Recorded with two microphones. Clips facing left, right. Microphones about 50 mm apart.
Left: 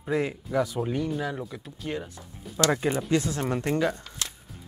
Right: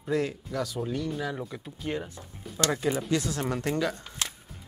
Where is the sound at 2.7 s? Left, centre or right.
Left.